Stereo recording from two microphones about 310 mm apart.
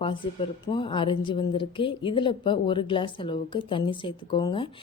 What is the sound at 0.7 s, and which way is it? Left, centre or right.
A woman's voice, centre.